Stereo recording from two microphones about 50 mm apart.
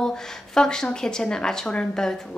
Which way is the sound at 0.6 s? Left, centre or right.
Centre.